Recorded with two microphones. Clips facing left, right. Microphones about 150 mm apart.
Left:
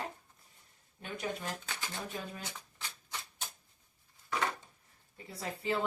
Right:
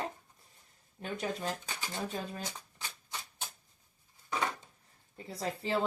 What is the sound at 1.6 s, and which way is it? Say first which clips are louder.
Speech: right 1 dB; 15° right (ahead or behind).